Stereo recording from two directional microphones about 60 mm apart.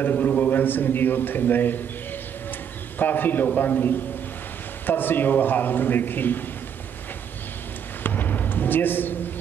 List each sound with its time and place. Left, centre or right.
0.0 s a man's voice: left
3.0 s a man's voice: left
8.0 s a sound: left